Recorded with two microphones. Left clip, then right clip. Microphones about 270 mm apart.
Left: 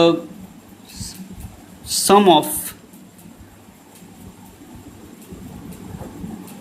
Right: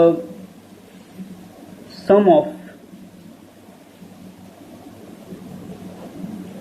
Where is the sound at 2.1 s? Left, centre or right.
Left.